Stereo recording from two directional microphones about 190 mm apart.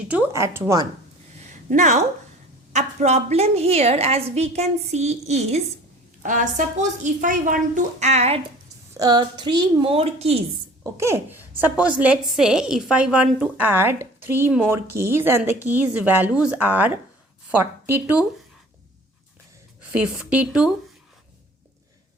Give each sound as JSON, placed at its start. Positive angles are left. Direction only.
{"t": 0.1, "sound": "speech", "side_deg": -10}
{"t": 1.7, "sound": "a woman's voice", "side_deg": -40}
{"t": 9.0, "sound": "a woman's voice", "side_deg": -20}
{"t": 10.9, "sound": "speech", "side_deg": -15}
{"t": 19.9, "sound": "a woman's voice", "side_deg": -5}